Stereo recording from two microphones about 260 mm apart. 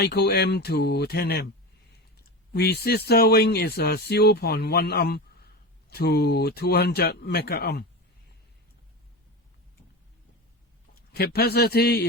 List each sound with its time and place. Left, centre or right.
0.0 s speech: left
2.5 s speech: left
10.9 s a man's voice: left